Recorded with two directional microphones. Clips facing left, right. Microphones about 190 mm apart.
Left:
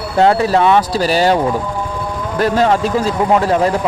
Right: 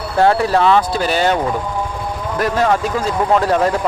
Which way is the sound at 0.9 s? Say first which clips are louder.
Left 3 dB; 35° left (ahead or behind).